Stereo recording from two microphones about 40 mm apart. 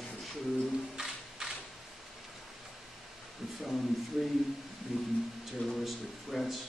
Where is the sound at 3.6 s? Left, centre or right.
Centre.